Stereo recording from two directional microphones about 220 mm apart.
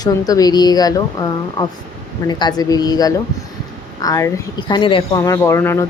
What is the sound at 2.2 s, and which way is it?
Speech, 15° left (ahead or behind).